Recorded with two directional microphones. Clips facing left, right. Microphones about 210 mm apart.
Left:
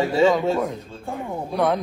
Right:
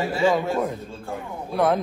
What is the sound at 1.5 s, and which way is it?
Speech, centre (ahead or behind).